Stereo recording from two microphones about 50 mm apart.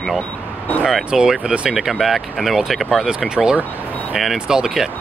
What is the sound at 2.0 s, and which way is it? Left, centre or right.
Speech, centre.